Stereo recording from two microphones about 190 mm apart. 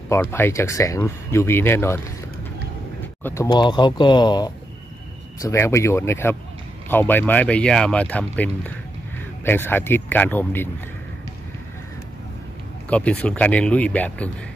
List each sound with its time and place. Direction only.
0.1 s speech: 15° left (ahead or behind)
3.4 s speech: 25° left (ahead or behind)
12.9 s speech: 5° left (ahead or behind)